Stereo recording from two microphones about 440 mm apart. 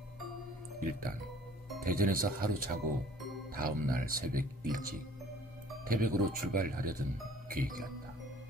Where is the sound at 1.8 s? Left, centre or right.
Centre.